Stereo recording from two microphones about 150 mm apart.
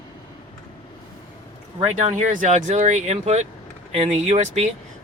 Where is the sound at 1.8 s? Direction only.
50° right (ahead or behind).